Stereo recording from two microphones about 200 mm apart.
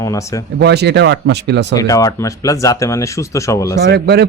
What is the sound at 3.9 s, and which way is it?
Speech, 55° right (ahead or behind).